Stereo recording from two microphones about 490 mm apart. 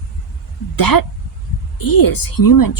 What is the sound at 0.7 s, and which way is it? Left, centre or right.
A woman's voice, left.